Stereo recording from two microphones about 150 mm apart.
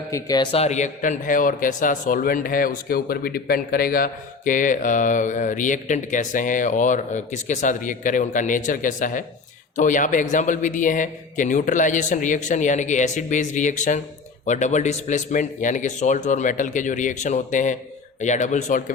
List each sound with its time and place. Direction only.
0.1 s a man's voice: 25° left (ahead or behind)
0.5 s a man's voice: 45° left (ahead or behind)